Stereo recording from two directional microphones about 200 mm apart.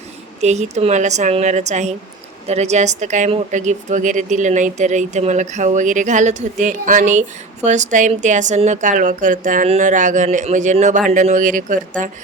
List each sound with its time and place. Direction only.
0.4 s a woman's voice: 35° right (ahead or behind)